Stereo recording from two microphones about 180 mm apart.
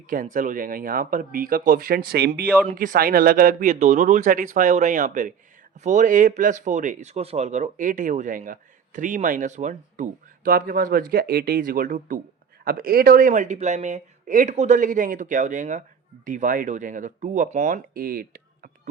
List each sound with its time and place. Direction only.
0.1 s speech: 45° right (ahead or behind); by 2.5 s 65° right (ahead or behind)
2.6 s speech: 50° right (ahead or behind)